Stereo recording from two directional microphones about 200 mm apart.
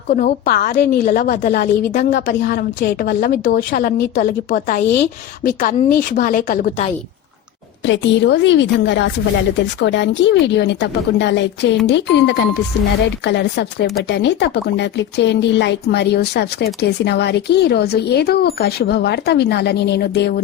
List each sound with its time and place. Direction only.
0.1 s a woman's voice: 45° left (ahead or behind)
7.9 s speech: 65° left (ahead or behind)